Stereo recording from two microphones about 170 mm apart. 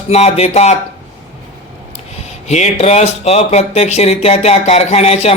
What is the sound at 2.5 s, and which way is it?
Speech, 40° left (ahead or behind).